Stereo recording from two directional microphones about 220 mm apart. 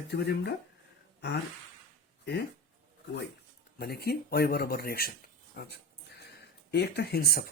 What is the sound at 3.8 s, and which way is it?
Speech, 45° left (ahead or behind).